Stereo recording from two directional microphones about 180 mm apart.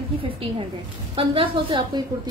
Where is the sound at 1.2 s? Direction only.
25° right (ahead or behind).